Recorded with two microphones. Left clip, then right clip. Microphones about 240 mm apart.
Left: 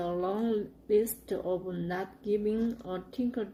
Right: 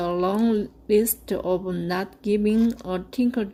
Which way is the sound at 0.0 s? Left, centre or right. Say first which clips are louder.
Right 8 dB; right.